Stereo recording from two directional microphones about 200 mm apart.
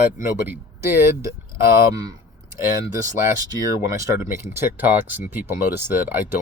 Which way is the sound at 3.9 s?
10° right (ahead or behind).